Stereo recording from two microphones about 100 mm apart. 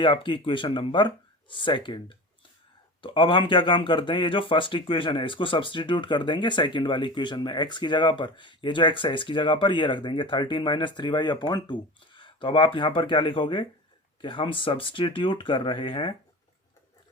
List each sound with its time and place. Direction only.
0.0 s a man's voice: 55° left (ahead or behind)